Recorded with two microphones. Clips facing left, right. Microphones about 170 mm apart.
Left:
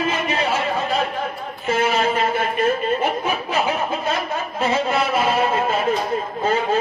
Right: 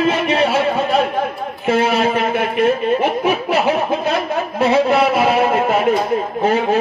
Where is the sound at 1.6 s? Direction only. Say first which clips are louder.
Right 4 dB; 65° right (ahead or behind).